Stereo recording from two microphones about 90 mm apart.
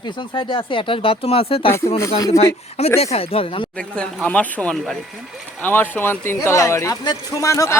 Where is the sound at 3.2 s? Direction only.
90° left.